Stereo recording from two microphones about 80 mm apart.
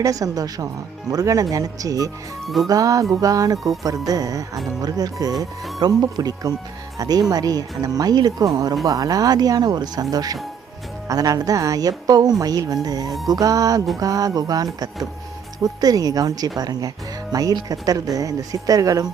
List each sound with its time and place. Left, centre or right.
0.0 s speech: right
8.8 s speech: right